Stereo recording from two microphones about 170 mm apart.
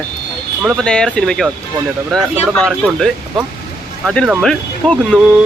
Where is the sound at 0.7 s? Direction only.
5° left (ahead or behind).